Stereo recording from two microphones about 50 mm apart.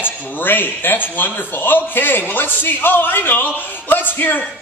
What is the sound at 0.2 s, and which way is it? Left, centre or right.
A man's voice, left.